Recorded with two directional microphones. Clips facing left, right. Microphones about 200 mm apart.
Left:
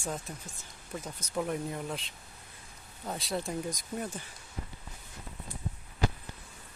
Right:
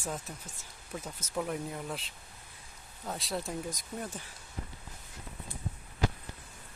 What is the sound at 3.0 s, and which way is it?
Speech, centre (ahead or behind).